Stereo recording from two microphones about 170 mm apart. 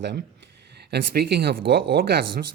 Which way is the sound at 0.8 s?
70° right (ahead or behind).